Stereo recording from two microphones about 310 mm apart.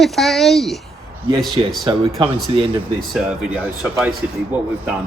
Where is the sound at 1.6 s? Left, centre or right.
Centre.